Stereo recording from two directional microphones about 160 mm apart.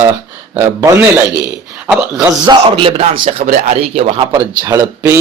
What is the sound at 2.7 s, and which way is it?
Speech, 35° right (ahead or behind).